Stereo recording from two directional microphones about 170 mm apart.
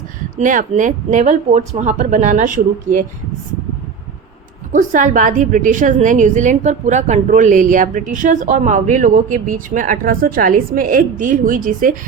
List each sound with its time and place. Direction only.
0.3 s a woman's voice: 45° right (ahead or behind)
4.7 s a woman's voice: 50° right (ahead or behind)